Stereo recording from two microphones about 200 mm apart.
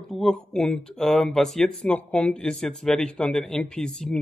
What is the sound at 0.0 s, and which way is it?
Speech, centre (ahead or behind).